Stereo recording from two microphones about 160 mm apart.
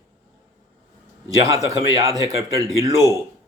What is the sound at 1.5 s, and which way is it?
A man's voice, 20° right (ahead or behind).